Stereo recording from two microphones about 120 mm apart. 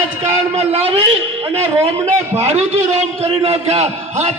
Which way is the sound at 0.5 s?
60° right (ahead or behind).